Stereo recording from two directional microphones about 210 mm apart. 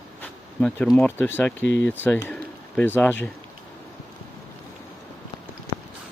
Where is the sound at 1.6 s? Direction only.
55° left (ahead or behind).